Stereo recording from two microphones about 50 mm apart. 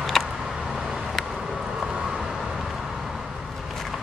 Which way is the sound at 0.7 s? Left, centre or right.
Centre.